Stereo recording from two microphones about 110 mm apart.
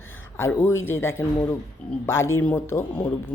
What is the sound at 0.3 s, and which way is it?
Speech, 20° left (ahead or behind).